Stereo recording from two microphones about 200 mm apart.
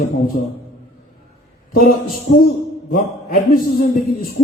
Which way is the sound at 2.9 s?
45° left (ahead or behind).